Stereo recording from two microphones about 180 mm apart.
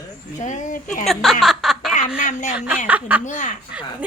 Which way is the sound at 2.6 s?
10° right (ahead or behind).